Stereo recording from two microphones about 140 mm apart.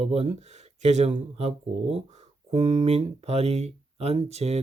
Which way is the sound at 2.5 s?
55° right (ahead or behind).